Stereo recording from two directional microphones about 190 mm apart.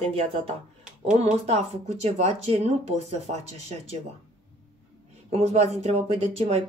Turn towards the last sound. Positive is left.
turn(degrees=-35)  # may be behind; listen again after turning